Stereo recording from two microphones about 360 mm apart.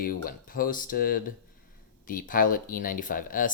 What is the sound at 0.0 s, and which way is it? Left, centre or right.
Speech, left.